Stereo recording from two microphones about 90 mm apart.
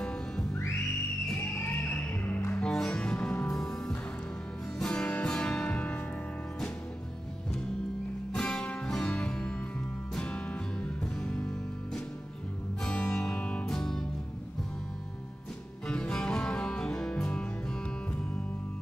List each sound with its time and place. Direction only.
0.0 s music: 10° left (ahead or behind)
2.6 s music: 10° left (ahead or behind)
8.3 s music: 10° left (ahead or behind)
15.9 s music: 10° left (ahead or behind)